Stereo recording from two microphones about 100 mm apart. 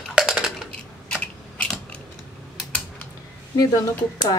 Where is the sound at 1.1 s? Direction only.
10° left (ahead or behind).